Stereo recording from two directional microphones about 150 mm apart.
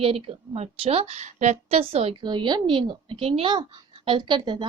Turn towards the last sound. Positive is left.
turn(degrees=-30)  # may be behind; listen again after turning